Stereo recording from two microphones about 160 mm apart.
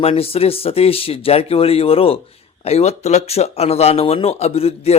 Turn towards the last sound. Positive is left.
turn(degrees=40)  # may be behind; listen again after turning